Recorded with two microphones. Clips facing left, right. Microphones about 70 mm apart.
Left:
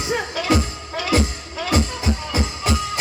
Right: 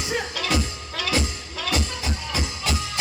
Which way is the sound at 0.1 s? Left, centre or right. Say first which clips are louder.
Left 5 dB; left.